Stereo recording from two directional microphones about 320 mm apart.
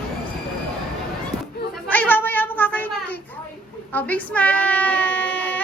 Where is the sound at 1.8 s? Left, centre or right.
Centre.